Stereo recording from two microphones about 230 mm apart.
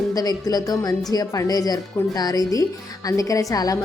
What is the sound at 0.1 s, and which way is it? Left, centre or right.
A woman's voice, centre.